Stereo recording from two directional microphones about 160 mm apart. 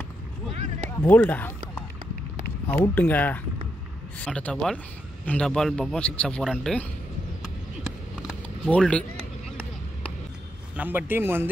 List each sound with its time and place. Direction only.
0.9 s a sound: 10° left (ahead or behind)
2.7 s a man's voice: 10° left (ahead or behind)
8.6 s speech: 10° left (ahead or behind)
10.8 s speech: 10° right (ahead or behind)